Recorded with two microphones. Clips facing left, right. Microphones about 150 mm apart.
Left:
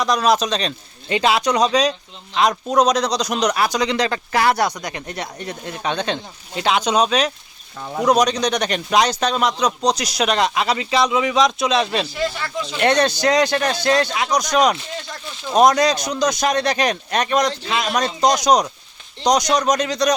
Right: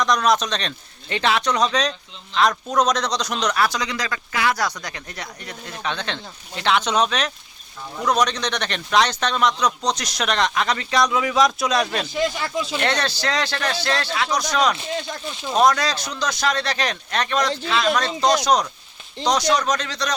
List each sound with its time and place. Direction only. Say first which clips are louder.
0.0 s speech: left 2 dB; 10° left (ahead or behind)
2.6 s speech: left 4 dB; 35° left (ahead or behind)
3.2 s speech: left 2 dB; 15° left (ahead or behind)
3.8 s speech: left 7 dB; 30° left (ahead or behind)
4.5 s speech: left 5 dB; 25° left (ahead or behind)
9.3 s speech: left 1 dB; 35° left (ahead or behind)
10.0 s speech: left 3 dB; 10° left (ahead or behind)
12.1 s speech: right 1 dB; 15° right (ahead or behind)
12.8 s speech: left 11 dB; 20° left (ahead or behind)
14.5 s speech: left 4 dB; 35° left (ahead or behind)
15.5 s speech: left 4 dB; 20° left (ahead or behind)